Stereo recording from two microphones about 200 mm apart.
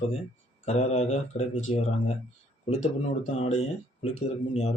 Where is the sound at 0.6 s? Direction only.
35° left (ahead or behind).